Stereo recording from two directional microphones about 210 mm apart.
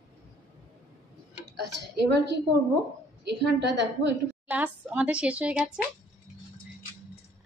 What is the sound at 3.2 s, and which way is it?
A woman's voice, 55° right (ahead or behind).